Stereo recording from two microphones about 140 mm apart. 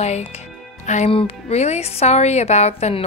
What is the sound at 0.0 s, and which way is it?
Speech, 50° left (ahead or behind).